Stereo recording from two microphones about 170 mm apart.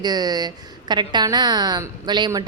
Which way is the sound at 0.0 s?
25° right (ahead or behind).